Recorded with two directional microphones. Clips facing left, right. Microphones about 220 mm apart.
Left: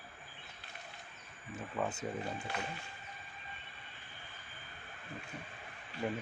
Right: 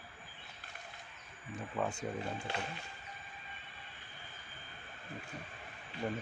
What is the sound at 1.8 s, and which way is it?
Speech, 5° left (ahead or behind).